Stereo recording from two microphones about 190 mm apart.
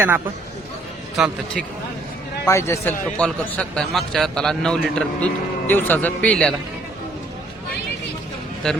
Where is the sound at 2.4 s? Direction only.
15° left (ahead or behind).